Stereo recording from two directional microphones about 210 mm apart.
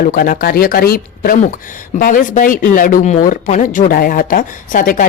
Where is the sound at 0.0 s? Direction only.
45° left (ahead or behind).